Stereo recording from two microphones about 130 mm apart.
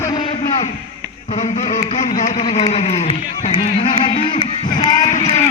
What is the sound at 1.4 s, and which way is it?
Speech, 65° left (ahead or behind).